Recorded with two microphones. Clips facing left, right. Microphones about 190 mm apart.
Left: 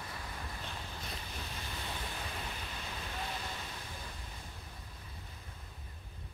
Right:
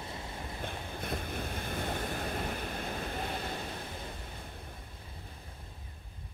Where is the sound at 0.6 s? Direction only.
55° right (ahead or behind).